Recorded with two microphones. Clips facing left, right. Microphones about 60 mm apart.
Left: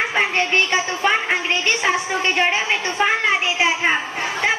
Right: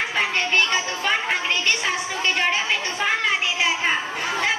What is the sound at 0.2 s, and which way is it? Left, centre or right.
Speech, left.